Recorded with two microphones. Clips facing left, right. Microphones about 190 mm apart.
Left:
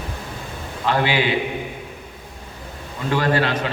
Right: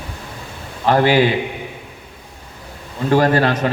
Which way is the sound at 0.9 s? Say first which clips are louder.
Right 7 dB; 40° right (ahead or behind).